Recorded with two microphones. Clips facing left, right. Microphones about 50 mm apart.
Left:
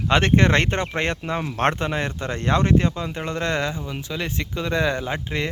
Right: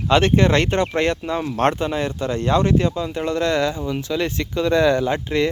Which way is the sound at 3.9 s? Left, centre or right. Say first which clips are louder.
Right 6 dB; centre.